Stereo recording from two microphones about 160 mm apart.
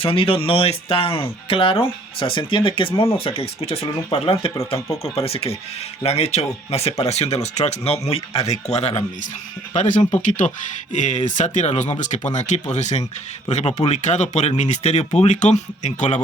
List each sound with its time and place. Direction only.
0.0 s speech: 35° left (ahead or behind)